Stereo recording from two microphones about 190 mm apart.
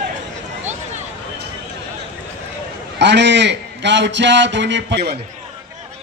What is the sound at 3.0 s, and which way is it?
A man's voice, 65° right (ahead or behind).